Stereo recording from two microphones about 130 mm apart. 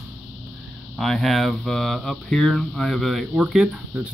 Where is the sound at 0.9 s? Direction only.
Centre (ahead or behind).